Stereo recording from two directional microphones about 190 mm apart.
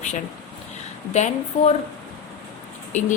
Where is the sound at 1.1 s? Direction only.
35° left (ahead or behind).